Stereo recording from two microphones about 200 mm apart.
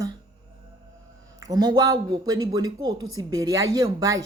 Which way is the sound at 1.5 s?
20° right (ahead or behind).